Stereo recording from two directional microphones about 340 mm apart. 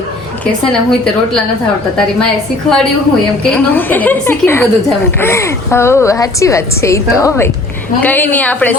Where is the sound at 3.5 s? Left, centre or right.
Centre.